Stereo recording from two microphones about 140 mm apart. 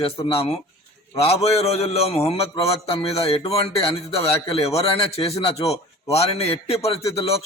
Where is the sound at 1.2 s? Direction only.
45° left (ahead or behind).